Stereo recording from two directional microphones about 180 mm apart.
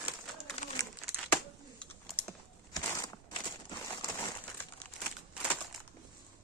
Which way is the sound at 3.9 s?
15° left (ahead or behind).